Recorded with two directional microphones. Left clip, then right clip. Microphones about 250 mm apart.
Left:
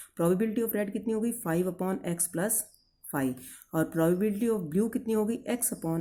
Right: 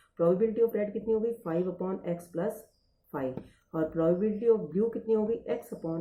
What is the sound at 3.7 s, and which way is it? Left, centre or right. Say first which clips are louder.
Speech: even; left.